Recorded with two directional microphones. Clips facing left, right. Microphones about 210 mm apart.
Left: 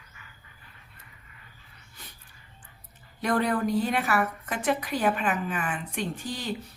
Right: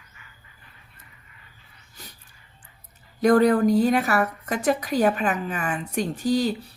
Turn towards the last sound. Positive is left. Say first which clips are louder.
# right 10 dB
turn(degrees=-40)  # may be behind; listen again after turning